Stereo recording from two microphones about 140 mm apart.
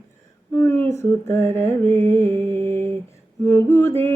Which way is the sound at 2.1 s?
15° left (ahead or behind).